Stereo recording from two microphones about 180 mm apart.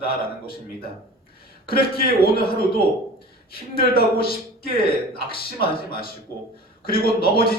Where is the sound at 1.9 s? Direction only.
55° left (ahead or behind).